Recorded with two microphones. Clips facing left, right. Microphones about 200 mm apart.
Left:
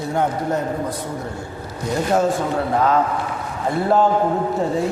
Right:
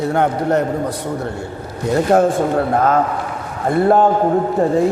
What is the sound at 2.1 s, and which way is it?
A man's voice, 50° right (ahead or behind).